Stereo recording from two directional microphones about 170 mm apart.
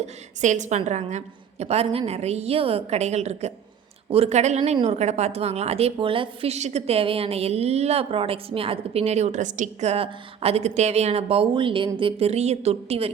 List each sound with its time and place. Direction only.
0.0 s a woman's voice: 45° right (ahead or behind)